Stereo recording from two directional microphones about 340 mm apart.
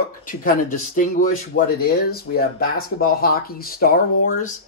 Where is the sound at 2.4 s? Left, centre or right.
Left.